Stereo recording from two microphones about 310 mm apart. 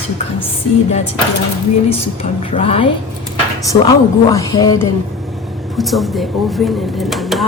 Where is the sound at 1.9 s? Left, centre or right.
Centre.